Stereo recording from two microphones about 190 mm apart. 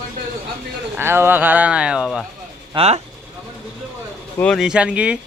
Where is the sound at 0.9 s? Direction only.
10° right (ahead or behind).